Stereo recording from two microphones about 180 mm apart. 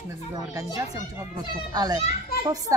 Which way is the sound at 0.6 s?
15° right (ahead or behind).